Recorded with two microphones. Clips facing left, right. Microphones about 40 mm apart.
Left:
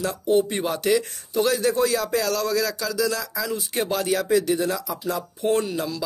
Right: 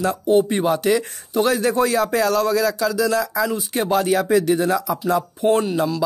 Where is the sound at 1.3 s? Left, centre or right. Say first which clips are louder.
Right 3 dB; right.